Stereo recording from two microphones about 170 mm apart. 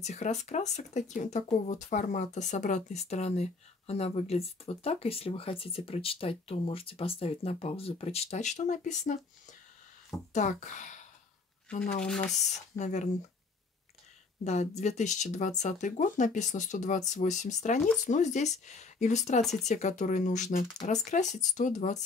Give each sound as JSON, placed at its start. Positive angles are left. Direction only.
{"t": 0.0, "sound": "speech", "side_deg": 45}
{"t": 12.0, "sound": "speech", "side_deg": 5}
{"t": 12.4, "sound": "speech", "side_deg": 45}
{"t": 14.4, "sound": "speech", "side_deg": 40}